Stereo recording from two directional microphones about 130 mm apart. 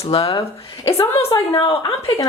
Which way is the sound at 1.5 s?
45° left (ahead or behind).